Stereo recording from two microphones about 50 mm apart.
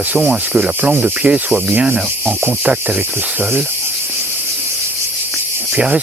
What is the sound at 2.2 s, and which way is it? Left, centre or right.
Cricket, right.